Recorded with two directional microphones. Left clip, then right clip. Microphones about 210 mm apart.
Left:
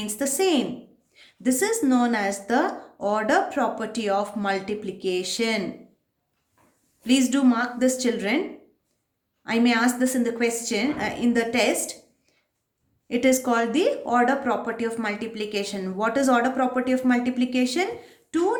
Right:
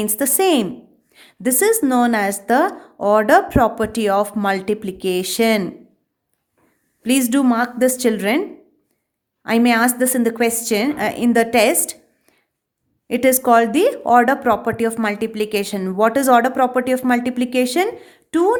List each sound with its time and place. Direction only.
0.0 s speech: 45° right (ahead or behind)
7.0 s speech: 45° right (ahead or behind)
9.4 s speech: 50° right (ahead or behind)
13.1 s speech: 45° right (ahead or behind)